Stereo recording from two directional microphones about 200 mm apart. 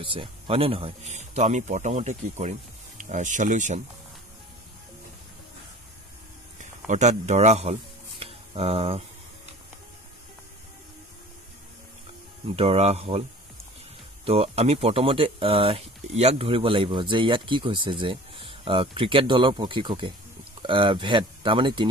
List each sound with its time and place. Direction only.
0.0 s speech: 25° right (ahead or behind)
6.9 s speech: 35° right (ahead or behind)
8.2 s a sound: 30° right (ahead or behind)
12.5 s speech: 30° right (ahead or behind)
14.2 s speech: 30° right (ahead or behind)